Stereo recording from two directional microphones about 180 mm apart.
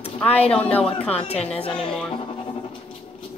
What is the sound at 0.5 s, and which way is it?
Speech, 5° left (ahead or behind).